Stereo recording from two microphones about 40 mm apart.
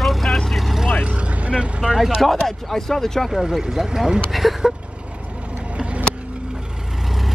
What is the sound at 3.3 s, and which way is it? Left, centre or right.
Speech, centre.